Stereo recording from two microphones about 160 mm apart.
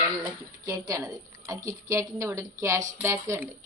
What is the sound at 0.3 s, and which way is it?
A woman's voice, 20° right (ahead or behind).